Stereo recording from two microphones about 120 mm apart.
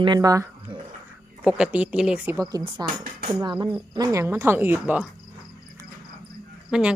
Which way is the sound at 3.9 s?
30° right (ahead or behind).